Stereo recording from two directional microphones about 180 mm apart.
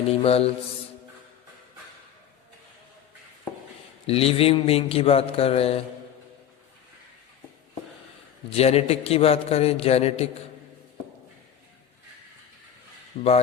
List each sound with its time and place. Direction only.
0.1 s speech: 35° left (ahead or behind)
4.0 s speech: 35° left (ahead or behind)
8.5 s speech: 35° left (ahead or behind)
13.2 s speech: 25° left (ahead or behind)